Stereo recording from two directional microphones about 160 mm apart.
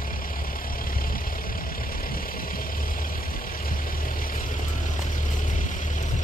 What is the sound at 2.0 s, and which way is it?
Vehicle, 65° left (ahead or behind).